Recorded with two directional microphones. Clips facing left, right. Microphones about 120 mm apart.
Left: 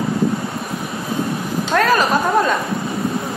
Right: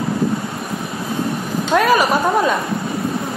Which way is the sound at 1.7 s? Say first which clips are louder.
Right 1 dB; 15° right (ahead or behind).